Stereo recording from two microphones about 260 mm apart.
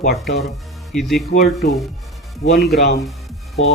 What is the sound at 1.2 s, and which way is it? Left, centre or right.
Speech, left.